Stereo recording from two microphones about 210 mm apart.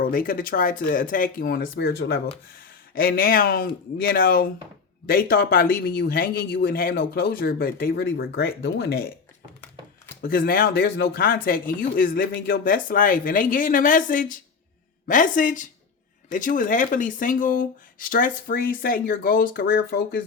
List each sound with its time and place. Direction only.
0.0 s speech: 40° left (ahead or behind)
10.2 s speech: 45° left (ahead or behind)